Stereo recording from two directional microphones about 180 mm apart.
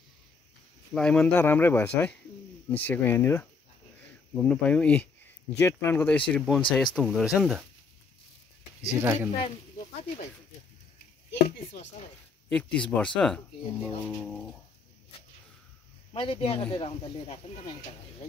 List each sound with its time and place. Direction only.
0.9 s speech: 5° left (ahead or behind)
9.0 s speech: 15° right (ahead or behind)
11.2 s a sound: 55° left (ahead or behind)
12.4 s speech: 5° left (ahead or behind)
16.1 s speech: 30° left (ahead or behind)